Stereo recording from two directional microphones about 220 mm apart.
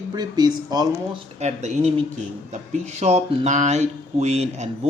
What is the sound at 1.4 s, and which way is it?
Speech, 30° right (ahead or behind).